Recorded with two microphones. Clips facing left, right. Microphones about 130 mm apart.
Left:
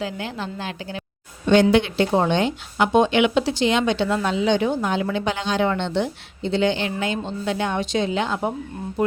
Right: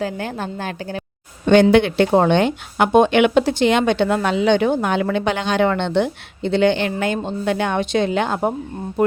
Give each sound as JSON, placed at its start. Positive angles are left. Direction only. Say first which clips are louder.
{"t": 0.0, "sound": "a woman's voice", "louder": "right 4 dB", "side_deg": -50}
{"t": 1.7, "sound": "speech", "louder": "right 4 dB", "side_deg": -60}